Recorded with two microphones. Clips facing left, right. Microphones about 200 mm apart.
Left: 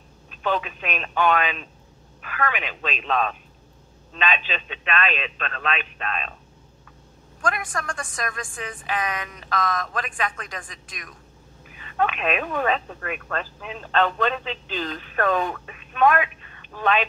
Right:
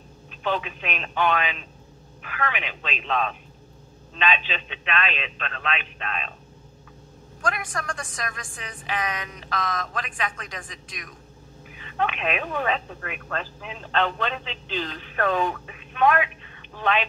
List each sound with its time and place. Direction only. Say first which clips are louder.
0.4 s a woman's voice: left 2 dB; 45° left (ahead or behind)
4.2 s a woman's voice: even; 45° left (ahead or behind)
7.4 s a woman's voice: left 1 dB; 50° left (ahead or behind)
12.1 s a woman's voice: left 2 dB; 45° left (ahead or behind)